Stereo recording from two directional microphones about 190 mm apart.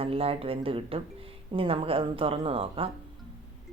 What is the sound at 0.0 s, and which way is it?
Speech, 30° right (ahead or behind).